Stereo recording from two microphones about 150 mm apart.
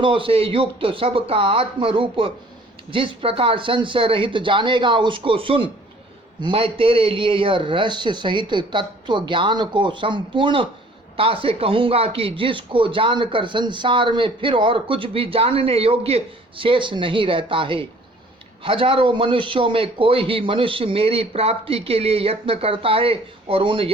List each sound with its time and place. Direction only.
0.0 s speech: 35° right (ahead or behind)